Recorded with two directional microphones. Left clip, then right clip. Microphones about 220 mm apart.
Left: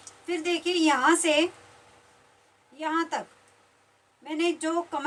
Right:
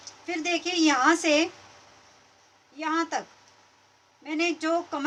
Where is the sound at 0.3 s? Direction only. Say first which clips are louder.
Even; 25° right (ahead or behind).